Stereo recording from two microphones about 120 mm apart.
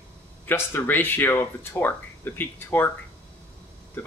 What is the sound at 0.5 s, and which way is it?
A man's voice, 15° left (ahead or behind).